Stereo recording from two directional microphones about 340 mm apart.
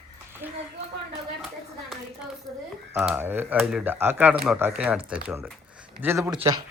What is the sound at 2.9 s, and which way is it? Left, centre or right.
Speech, centre.